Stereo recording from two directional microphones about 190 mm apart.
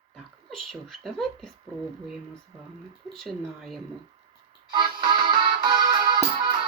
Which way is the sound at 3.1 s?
Centre (ahead or behind).